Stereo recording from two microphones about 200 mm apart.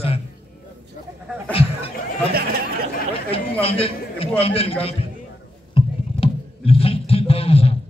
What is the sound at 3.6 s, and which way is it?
A man's voice, 30° left (ahead or behind).